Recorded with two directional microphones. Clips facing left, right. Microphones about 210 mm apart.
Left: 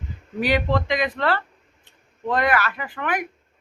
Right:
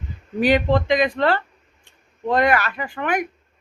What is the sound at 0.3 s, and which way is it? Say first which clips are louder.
Speech: right 4 dB; 25° right (ahead or behind).